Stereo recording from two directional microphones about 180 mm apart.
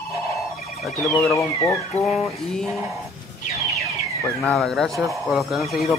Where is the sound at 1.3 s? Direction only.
15° left (ahead or behind).